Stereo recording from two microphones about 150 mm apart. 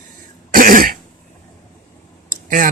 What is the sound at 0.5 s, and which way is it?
Cough, 65° right (ahead or behind).